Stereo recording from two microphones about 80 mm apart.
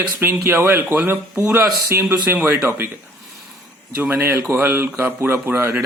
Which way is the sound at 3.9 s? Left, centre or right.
Right.